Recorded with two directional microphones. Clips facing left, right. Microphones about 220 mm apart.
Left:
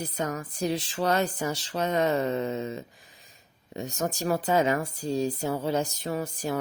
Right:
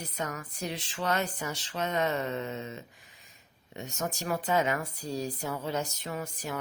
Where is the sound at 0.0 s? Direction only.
35° left (ahead or behind).